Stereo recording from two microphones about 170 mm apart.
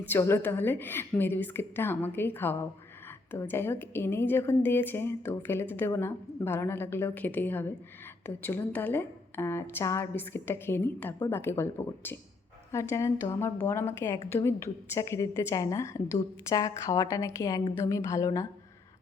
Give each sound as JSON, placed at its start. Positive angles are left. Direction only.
{"t": 0.0, "sound": "a woman's voice", "side_deg": 10}